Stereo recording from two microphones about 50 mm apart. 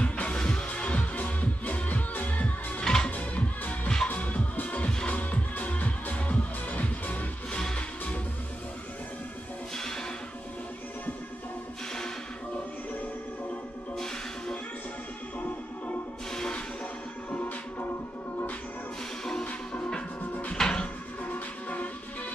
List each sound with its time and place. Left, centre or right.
0.0 s music: left
2.8 s music: centre
3.1 s music: left
7.5 s music: centre
16.3 s music: centre
19.4 s music: left
21.2 s music: left